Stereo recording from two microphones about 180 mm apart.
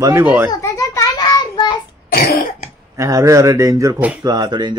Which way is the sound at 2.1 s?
50° left (ahead or behind).